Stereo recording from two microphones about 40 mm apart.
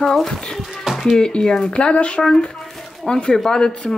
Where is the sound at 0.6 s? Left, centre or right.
Centre.